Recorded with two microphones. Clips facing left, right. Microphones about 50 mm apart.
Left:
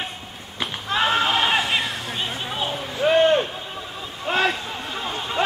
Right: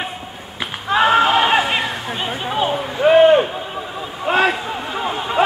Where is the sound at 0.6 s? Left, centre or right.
Centre.